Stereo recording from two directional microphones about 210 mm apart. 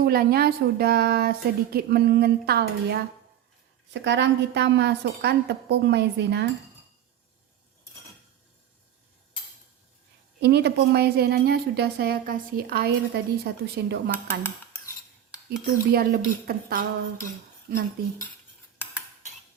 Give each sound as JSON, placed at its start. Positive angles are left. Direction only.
{"t": 0.0, "sound": "a woman's voice", "side_deg": -45}
{"t": 10.4, "sound": "speech", "side_deg": -50}
{"t": 14.1, "sound": "speech", "side_deg": 10}
{"t": 15.4, "sound": "speech", "side_deg": -45}